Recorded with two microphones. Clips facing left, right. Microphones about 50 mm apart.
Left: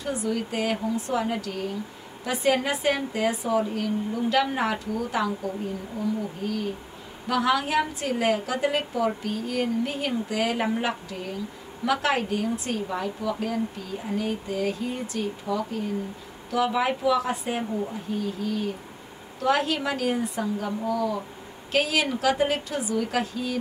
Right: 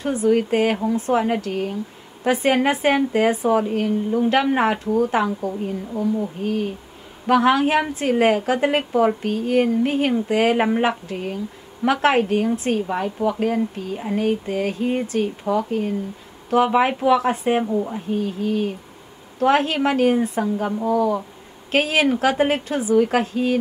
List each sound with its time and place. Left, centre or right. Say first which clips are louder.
0.0 s a woman's voice: right 9 dB; right